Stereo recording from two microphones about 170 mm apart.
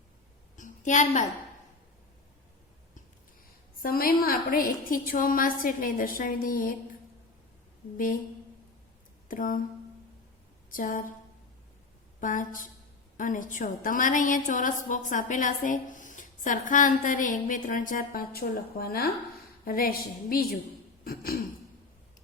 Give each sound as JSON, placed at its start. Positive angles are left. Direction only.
{"t": 0.5, "sound": "a woman's voice", "side_deg": 50}
{"t": 3.8, "sound": "a woman's voice", "side_deg": 60}
{"t": 9.3, "sound": "a woman's voice", "side_deg": 55}
{"t": 10.7, "sound": "a woman's voice", "side_deg": 55}
{"t": 12.2, "sound": "a woman's voice", "side_deg": 50}
{"t": 21.0, "sound": "throat clearing", "side_deg": 60}